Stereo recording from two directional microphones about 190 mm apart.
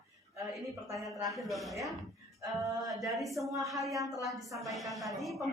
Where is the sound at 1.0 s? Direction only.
Centre (ahead or behind).